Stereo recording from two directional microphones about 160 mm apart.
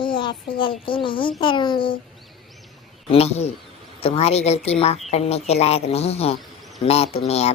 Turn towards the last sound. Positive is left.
turn(degrees=40)  # may be behind; listen again after turning